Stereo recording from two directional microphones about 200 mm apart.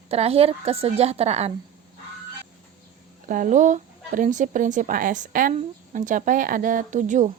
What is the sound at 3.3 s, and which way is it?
Speech, 40° right (ahead or behind).